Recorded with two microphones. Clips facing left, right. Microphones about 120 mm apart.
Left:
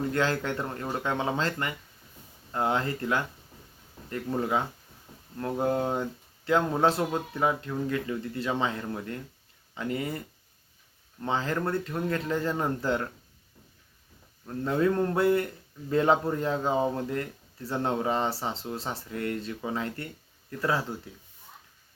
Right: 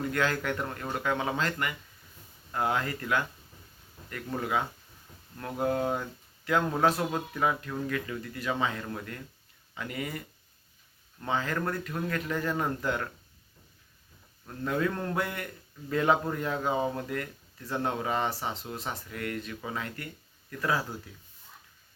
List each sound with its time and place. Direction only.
0.1 s speech: 30° left (ahead or behind)
4.4 s speech: 25° left (ahead or behind)
14.4 s speech: 25° left (ahead or behind)